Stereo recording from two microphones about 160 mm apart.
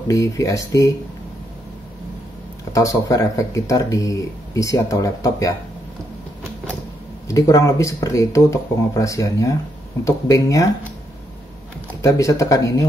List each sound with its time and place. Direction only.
0.1 s speech: 20° left (ahead or behind)
2.7 s speech: 20° left (ahead or behind)
7.2 s speech: 20° left (ahead or behind)
12.0 s speech: 20° left (ahead or behind)